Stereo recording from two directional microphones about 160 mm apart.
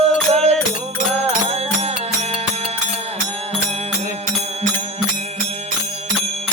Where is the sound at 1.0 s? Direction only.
40° right (ahead or behind).